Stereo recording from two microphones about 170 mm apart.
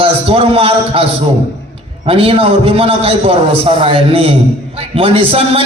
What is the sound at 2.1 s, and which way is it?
A man's voice, 35° right (ahead or behind).